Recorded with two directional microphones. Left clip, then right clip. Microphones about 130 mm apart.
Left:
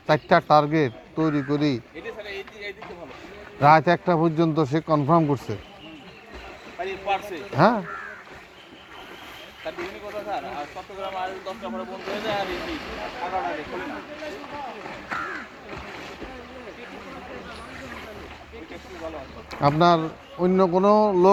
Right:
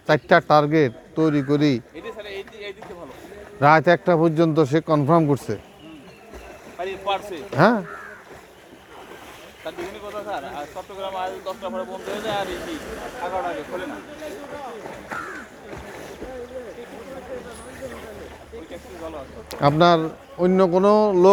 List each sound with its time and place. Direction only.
0.1 s speech: 90° right
2.0 s a sound: 15° left (ahead or behind)
3.6 s speech: 90° right
6.7 s a sound: 10° left (ahead or behind)
7.5 s speech: 90° right
9.6 s speech: 20° left (ahead or behind)
15.7 s boat: 20° left (ahead or behind)
19.8 s speech: 90° right